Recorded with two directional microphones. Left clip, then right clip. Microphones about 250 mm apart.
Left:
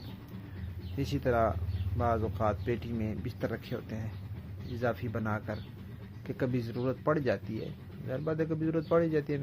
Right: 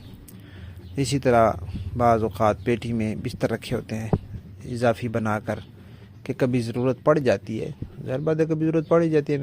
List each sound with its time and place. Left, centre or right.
0.9 s speech: right